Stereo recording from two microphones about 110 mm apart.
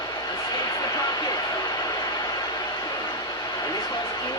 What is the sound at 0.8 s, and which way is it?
Vehicle, 35° left (ahead or behind).